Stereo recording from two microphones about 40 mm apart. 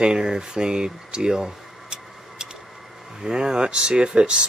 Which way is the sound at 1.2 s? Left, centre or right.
Centre.